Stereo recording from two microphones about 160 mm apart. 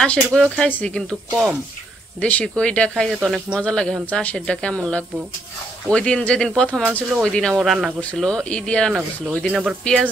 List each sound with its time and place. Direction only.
0.0 s speech: 5° left (ahead or behind)